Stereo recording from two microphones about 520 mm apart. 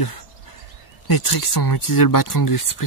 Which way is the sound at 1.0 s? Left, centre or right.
Left.